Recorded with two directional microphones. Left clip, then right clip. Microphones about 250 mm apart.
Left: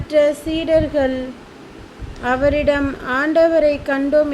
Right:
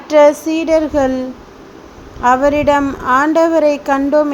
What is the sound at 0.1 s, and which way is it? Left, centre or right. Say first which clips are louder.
A woman's voice: right 6 dB; centre.